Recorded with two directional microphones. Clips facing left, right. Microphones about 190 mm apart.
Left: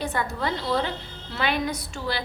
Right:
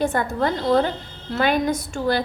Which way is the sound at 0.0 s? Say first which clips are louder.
Right 6 dB; 50° right (ahead or behind).